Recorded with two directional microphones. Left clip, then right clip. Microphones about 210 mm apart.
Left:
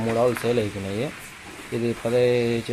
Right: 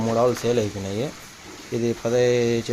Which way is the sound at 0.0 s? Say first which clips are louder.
Right 1 dB; 15° right (ahead or behind).